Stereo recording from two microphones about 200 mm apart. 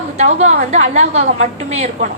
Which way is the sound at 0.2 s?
35° right (ahead or behind).